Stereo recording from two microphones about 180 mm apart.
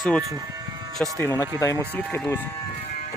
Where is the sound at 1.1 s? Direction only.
15° left (ahead or behind).